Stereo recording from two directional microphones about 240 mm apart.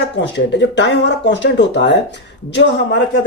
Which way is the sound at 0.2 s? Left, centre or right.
Left.